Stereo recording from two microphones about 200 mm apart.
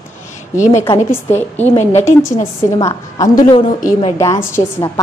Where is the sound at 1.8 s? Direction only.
35° left (ahead or behind).